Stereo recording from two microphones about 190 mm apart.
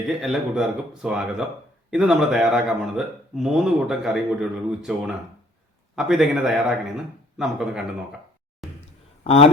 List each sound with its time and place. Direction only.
0.2 s a man's voice: centre (ahead or behind)
8.6 s a sound: centre (ahead or behind)
9.2 s a man's voice: 30° left (ahead or behind)